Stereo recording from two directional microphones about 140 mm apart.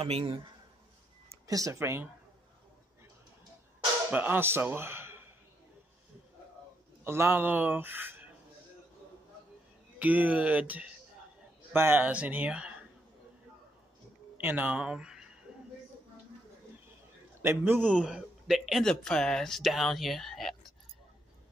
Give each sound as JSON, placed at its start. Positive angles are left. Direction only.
{"t": 0.0, "sound": "a man's voice", "side_deg": -45}
{"t": 1.5, "sound": "speech", "side_deg": -25}
{"t": 4.1, "sound": "speech", "side_deg": -15}
{"t": 7.1, "sound": "speech", "side_deg": -15}
{"t": 9.9, "sound": "speech", "side_deg": -10}
{"t": 14.3, "sound": "speech", "side_deg": -15}
{"t": 17.4, "sound": "speech", "side_deg": -15}